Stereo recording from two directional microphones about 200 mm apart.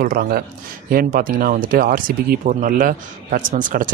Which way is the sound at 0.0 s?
50° right (ahead or behind).